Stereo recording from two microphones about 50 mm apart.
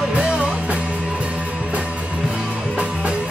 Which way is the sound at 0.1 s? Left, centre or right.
Right.